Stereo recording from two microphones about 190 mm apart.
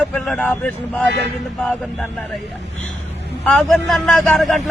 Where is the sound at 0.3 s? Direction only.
5° left (ahead or behind).